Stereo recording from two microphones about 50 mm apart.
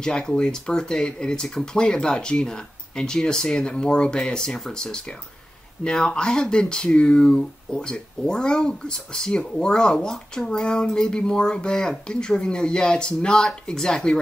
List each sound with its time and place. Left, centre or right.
0.0 s speech: centre